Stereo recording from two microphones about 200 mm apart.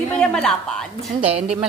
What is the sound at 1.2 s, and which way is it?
Speech, 30° right (ahead or behind).